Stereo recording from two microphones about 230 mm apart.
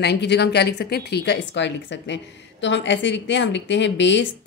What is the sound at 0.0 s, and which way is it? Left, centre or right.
A woman's voice, left.